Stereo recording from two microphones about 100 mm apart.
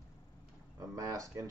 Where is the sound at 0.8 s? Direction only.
35° right (ahead or behind).